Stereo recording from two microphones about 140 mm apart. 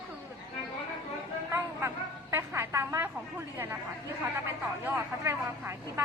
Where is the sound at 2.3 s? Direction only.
15° right (ahead or behind).